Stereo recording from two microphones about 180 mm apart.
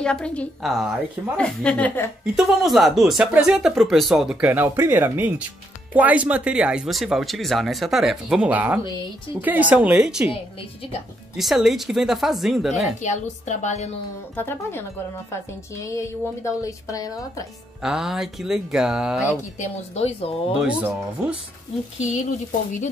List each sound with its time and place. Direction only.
0.0 s a woman's voice: 5° left (ahead or behind)
11.3 s speech: centre (ahead or behind)
13.0 s speech: 40° left (ahead or behind)
14.3 s speech: 10° left (ahead or behind)
17.8 s speech: centre (ahead or behind)
19.6 s speech: 35° left (ahead or behind)
20.6 s a woman's voice: 5° right (ahead or behind)